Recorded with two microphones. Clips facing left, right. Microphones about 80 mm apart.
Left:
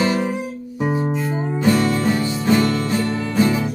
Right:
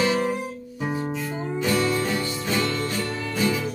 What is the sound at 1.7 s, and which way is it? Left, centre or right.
Music, left.